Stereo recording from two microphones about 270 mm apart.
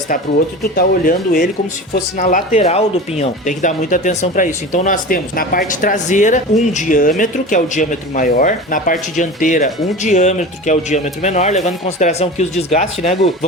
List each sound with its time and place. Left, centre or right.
0.8 s speech: left